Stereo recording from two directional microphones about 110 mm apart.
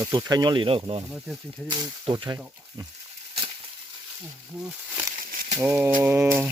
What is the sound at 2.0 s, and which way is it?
Speech, 45° right (ahead or behind).